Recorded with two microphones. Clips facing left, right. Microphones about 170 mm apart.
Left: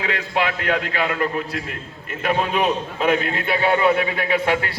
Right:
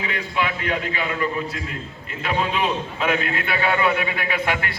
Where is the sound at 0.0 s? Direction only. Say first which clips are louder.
Left 3 dB; 75° left (ahead or behind).